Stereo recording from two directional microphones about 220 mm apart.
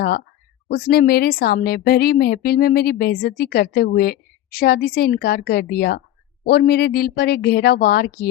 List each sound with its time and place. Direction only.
0.7 s a woman's voice: 45° left (ahead or behind)